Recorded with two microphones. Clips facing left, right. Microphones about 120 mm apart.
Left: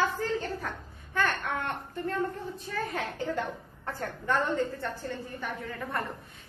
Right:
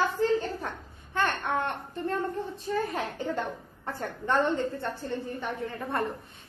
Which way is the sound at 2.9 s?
25° right (ahead or behind).